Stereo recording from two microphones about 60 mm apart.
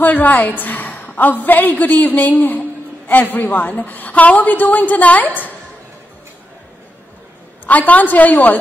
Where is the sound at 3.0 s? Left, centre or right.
Left.